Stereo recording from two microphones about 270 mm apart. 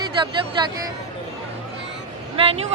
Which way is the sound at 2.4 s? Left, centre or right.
Centre.